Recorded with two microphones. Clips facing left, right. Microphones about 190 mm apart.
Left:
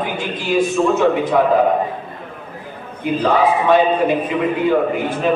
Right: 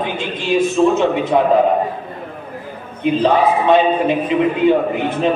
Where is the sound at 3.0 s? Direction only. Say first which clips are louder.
Right 2 dB; 20° right (ahead or behind).